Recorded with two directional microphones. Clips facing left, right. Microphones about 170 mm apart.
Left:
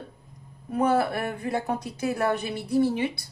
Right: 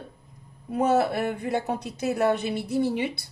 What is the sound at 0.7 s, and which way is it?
Speech, 25° right (ahead or behind).